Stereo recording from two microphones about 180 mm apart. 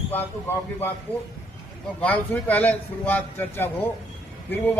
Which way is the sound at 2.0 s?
10° left (ahead or behind).